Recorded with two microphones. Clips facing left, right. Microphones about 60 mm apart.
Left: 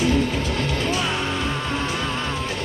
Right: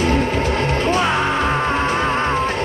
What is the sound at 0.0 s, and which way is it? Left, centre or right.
Music, right.